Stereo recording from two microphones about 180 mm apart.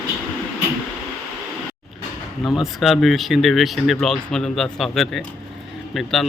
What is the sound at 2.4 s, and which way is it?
Speech, centre (ahead or behind).